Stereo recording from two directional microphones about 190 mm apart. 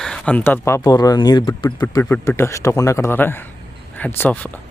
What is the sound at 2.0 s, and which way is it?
Speech, 10° left (ahead or behind).